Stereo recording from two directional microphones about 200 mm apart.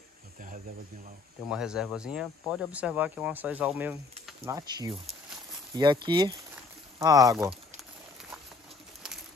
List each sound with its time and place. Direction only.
1.5 s speech: 5° right (ahead or behind)
4.5 s speech: 20° right (ahead or behind)
6.5 s a sound: 15° right (ahead or behind)